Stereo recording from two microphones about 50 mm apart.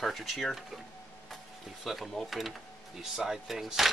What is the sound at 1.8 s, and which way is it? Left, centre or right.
Speech, centre.